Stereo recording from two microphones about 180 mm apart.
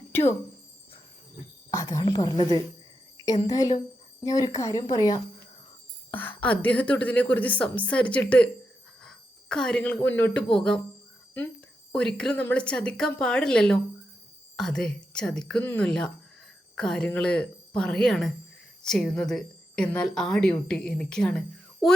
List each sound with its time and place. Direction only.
0.1 s speech: 10° left (ahead or behind)
1.7 s a woman's voice: 15° left (ahead or behind)
6.1 s a woman's voice: 10° left (ahead or behind)
11.9 s a woman's voice: 5° left (ahead or behind)